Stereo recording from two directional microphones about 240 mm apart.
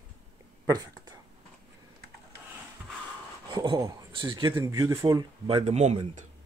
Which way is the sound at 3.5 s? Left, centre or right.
Centre.